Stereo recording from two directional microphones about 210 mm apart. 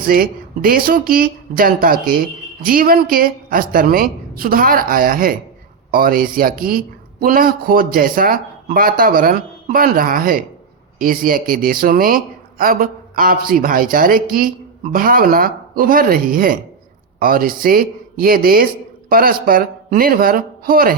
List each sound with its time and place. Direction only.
0.0 s a man's voice: 45° right (ahead or behind)